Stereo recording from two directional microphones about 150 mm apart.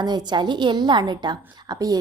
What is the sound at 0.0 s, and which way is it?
A woman's voice, 30° right (ahead or behind).